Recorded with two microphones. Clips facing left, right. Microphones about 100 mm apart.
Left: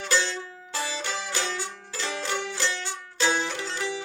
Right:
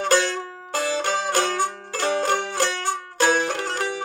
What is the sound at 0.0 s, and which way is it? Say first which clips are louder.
Music: right 7 dB; 55° right (ahead or behind).